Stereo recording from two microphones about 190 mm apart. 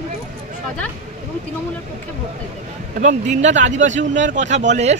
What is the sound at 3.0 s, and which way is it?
Speech, 40° right (ahead or behind).